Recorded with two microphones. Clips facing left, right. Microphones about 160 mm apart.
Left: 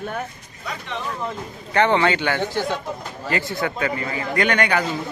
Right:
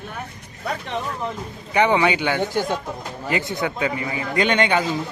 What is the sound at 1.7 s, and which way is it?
Speech, 10° right (ahead or behind).